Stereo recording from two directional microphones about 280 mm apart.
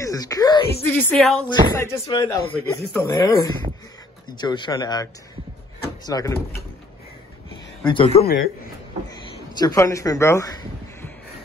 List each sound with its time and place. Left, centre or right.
0.0 s speech: centre
1.8 s speech: centre
7.8 s speech: centre
9.6 s a man's voice: centre